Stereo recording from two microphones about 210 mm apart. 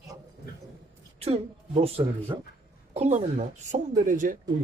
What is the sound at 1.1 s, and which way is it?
A woman's voice, 30° right (ahead or behind).